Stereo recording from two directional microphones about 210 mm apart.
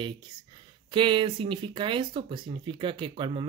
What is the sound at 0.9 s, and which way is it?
Speech, 25° right (ahead or behind).